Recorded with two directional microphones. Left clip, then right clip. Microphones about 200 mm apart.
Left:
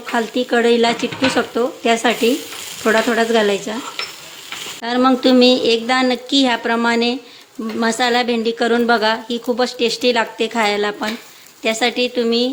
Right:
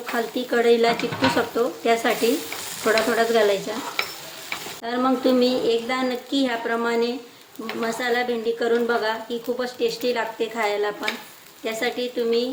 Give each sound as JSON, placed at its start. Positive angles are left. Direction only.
{"t": 0.3, "sound": "a woman's voice", "side_deg": 45}
{"t": 4.8, "sound": "a woman's voice", "side_deg": 45}